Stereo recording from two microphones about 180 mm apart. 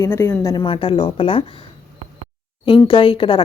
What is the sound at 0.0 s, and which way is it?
Speech, 15° left (ahead or behind).